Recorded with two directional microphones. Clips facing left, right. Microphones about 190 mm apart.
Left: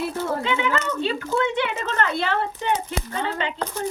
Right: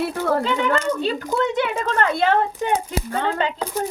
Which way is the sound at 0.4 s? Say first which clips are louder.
Right 3 dB; 40° right (ahead or behind).